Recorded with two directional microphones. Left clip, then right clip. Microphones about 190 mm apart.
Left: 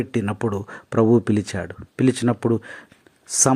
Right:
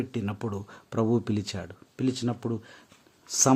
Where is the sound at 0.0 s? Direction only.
20° left (ahead or behind).